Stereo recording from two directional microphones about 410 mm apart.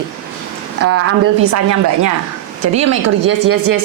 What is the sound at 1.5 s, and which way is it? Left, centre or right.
A woman's voice, right.